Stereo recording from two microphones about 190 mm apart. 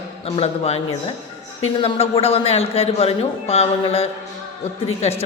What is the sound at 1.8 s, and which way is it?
A man's voice, 30° left (ahead or behind).